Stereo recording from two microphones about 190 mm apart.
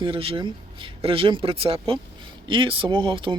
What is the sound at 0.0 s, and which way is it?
Speech, 30° right (ahead or behind).